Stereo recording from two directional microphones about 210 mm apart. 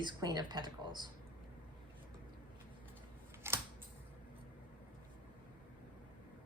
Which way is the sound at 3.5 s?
10° right (ahead or behind).